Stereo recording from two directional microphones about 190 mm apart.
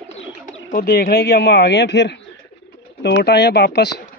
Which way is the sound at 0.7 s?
50° left (ahead or behind).